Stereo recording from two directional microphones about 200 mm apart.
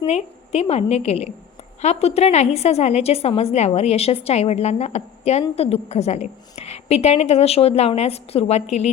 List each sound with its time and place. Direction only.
0.0 s a woman's voice: 30° left (ahead or behind)